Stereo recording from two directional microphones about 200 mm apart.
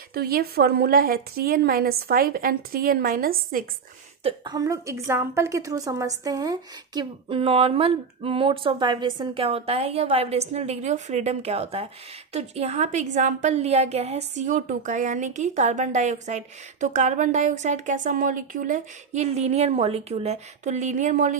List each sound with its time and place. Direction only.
0.1 s a woman's voice: 50° right (ahead or behind)
4.2 s a woman's voice: 25° right (ahead or behind)